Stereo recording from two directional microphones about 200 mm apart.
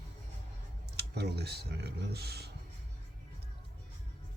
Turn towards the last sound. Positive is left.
turn(degrees=-55)  # may be behind; listen again after turning